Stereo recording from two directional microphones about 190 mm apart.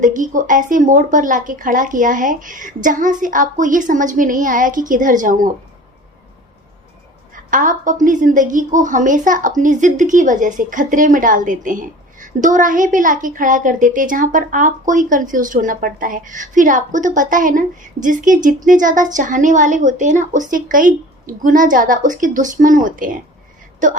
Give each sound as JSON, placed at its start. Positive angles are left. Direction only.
{"t": 0.0, "sound": "a woman's voice", "side_deg": -40}
{"t": 7.3, "sound": "a woman's voice", "side_deg": -45}